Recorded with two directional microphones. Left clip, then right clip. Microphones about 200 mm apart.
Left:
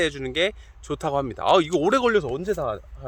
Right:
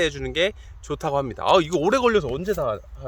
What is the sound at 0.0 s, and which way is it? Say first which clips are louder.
Speech: right 1 dB; 15° left (ahead or behind).